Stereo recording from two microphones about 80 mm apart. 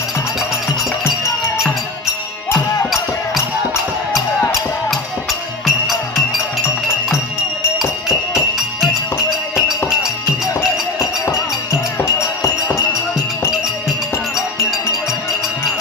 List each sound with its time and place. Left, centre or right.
4.9 s music: centre
7.8 s music: centre
11.9 s music: left